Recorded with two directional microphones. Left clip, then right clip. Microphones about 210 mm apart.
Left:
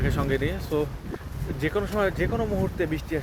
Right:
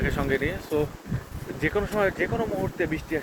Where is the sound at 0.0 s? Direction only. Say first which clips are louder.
Right 1 dB; 20° left (ahead or behind).